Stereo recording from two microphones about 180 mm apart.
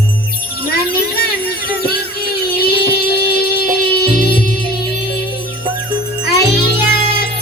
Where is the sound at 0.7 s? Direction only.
60° left (ahead or behind).